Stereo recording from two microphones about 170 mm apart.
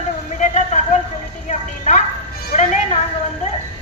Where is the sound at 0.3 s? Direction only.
45° left (ahead or behind).